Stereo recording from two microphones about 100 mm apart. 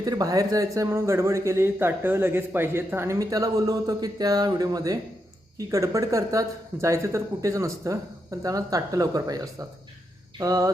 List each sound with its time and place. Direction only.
0.0 s a man's voice: 35° right (ahead or behind)
3.2 s speech: 35° right (ahead or behind)